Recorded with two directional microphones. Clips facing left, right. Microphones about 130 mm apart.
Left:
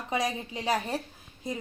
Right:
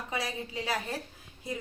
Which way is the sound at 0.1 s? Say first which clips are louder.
Left 6 dB; 20° left (ahead or behind).